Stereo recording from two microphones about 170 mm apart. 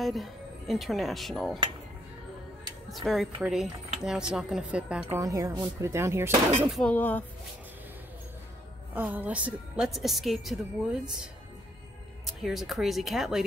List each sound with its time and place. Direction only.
0.0 s speech: centre (ahead or behind)
2.9 s a woman's voice: centre (ahead or behind)
5.1 s speech: 20° right (ahead or behind)
6.7 s speech: 5° left (ahead or behind)
8.9 s a woman's voice: 10° right (ahead or behind)
12.3 s a woman's voice: centre (ahead or behind)